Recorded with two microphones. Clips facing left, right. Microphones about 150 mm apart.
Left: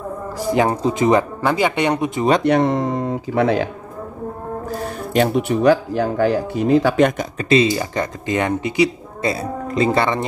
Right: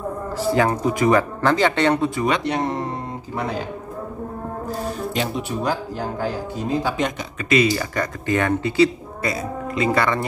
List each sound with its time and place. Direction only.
0.4 s speech: 15° left (ahead or behind)
1.4 s speech: 10° left (ahead or behind)
2.4 s speech: 70° left (ahead or behind)
5.1 s speech: 60° left (ahead or behind)
7.3 s speech: 30° left (ahead or behind)
9.2 s speech: 30° left (ahead or behind)